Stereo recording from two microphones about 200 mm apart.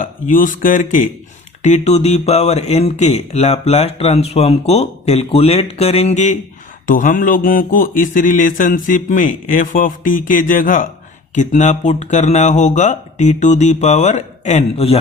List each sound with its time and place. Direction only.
0.0 s speech: 40° left (ahead or behind)